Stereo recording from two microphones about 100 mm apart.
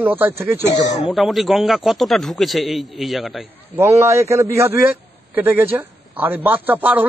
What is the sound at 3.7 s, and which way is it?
A man's voice, 25° right (ahead or behind).